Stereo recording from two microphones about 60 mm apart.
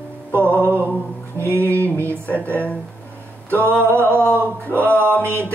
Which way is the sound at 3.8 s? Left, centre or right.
Right.